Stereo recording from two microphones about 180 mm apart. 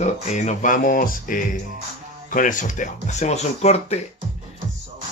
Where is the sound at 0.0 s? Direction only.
40° left (ahead or behind).